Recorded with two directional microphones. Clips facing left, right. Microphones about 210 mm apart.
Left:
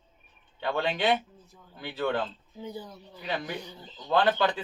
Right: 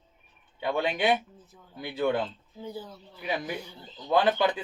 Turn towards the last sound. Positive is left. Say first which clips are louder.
# right 1 dB
turn(degrees=-15)  # may be behind; listen again after turning